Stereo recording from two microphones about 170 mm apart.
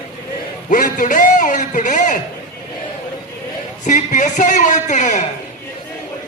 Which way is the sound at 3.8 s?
45° left (ahead or behind).